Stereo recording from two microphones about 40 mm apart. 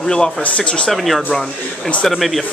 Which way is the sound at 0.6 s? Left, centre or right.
Left.